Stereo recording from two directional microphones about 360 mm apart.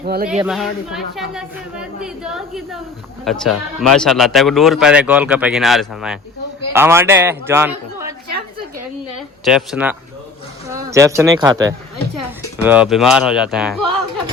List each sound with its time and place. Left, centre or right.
0.0 s speech: right
0.3 s a man's voice: centre
9.4 s a man's voice: centre